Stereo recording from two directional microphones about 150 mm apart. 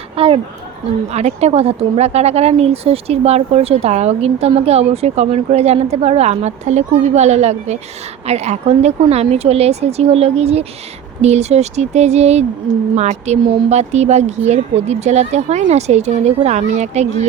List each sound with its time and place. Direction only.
0.2 s speech: 40° right (ahead or behind)